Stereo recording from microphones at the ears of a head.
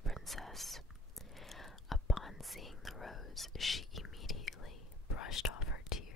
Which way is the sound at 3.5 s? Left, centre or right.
Left.